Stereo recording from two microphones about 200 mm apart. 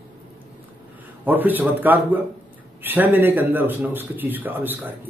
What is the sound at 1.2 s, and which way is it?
Speech, 10° right (ahead or behind).